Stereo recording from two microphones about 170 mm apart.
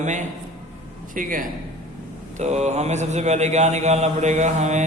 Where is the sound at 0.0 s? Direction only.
45° right (ahead or behind).